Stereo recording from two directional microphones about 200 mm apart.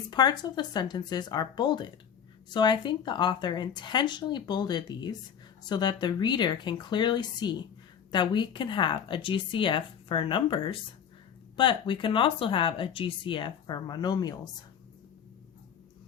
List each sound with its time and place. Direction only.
0.1 s speech: 20° left (ahead or behind)